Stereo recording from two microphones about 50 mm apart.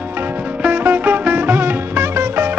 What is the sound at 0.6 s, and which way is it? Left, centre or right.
Music, right.